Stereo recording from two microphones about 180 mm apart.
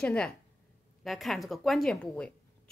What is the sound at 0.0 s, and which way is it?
A woman's voice, 5° left (ahead or behind).